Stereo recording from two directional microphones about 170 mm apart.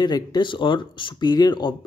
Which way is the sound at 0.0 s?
25° left (ahead or behind).